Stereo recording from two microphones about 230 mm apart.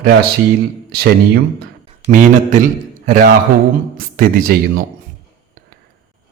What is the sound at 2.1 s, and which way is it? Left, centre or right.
A man's voice, right.